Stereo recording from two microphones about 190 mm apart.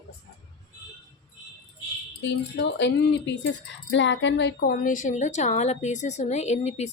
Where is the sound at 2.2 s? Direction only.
70° left (ahead or behind).